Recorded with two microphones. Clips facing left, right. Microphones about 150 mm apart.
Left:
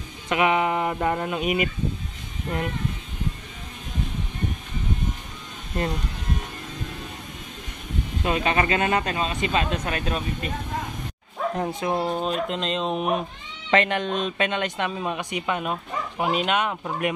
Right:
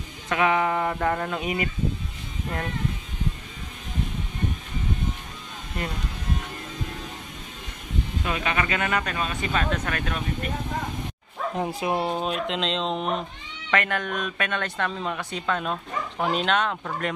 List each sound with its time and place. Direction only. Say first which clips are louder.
0.3 s speech: left 1 dB; 20° left (ahead or behind)
8.2 s speech: left 5 dB; 30° left (ahead or behind)
11.5 s speech: right 1 dB; 5° right (ahead or behind); by 13.2 s 10° left (ahead or behind)
13.7 s speech: left 4 dB; 25° left (ahead or behind)